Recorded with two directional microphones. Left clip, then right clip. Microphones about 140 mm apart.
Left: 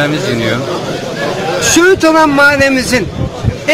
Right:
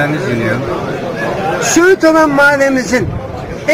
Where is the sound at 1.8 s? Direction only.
Centre (ahead or behind).